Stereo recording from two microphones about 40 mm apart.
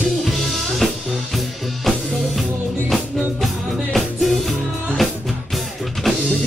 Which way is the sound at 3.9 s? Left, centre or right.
Centre.